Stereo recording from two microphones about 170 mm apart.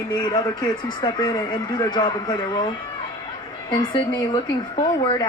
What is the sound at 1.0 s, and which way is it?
Speech, 25° left (ahead or behind).